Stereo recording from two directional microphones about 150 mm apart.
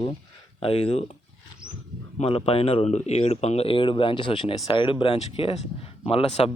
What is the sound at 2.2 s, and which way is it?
Speech, 40° left (ahead or behind).